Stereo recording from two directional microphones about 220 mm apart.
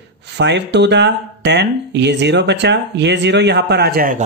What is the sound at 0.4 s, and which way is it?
Speech, 50° right (ahead or behind).